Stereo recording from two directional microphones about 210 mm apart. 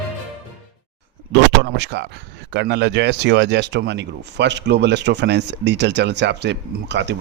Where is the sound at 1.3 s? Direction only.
55° right (ahead or behind).